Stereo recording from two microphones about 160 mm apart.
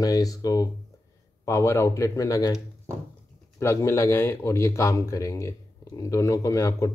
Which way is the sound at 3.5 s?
15° left (ahead or behind).